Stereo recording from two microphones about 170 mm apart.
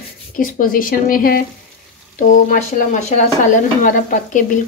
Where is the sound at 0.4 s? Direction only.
55° left (ahead or behind).